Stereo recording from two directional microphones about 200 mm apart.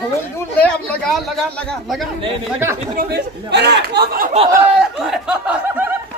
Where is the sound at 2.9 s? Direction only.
50° right (ahead or behind).